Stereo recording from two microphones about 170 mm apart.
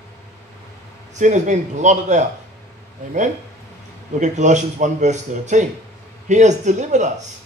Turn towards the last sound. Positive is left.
turn(degrees=-45)  # may be behind; listen again after turning